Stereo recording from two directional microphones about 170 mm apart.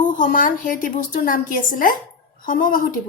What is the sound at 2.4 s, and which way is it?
Speech, 55° left (ahead or behind).